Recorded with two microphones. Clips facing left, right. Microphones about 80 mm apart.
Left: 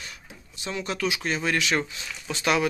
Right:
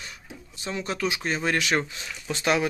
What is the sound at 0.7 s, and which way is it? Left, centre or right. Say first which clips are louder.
Speech: even; right.